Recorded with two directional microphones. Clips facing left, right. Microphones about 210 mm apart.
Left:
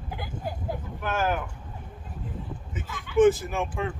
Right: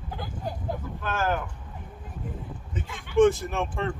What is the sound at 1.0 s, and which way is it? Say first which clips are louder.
Speech: left 1 dB; 10° left (ahead or behind).